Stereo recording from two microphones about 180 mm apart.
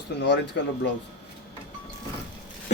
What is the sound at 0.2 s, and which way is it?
Speech, 75° left (ahead or behind).